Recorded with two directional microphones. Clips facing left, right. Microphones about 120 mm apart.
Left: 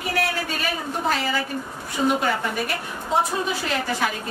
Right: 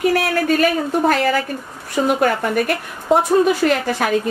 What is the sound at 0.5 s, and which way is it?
A woman's voice, 55° right (ahead or behind).